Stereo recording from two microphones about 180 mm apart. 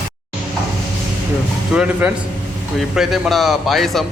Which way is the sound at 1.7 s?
5° right (ahead or behind).